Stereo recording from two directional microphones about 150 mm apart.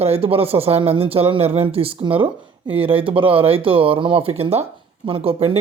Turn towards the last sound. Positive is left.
turn(degrees=-40)  # may be behind; listen again after turning